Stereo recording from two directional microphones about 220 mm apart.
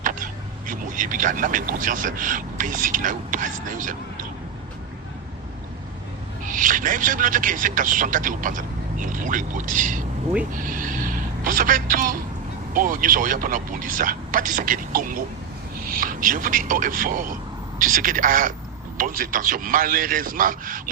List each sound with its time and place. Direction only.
0.0 s a sound: 35° right (ahead or behind)
0.7 s speech: 35° right (ahead or behind)
6.5 s a man's voice: 35° right (ahead or behind)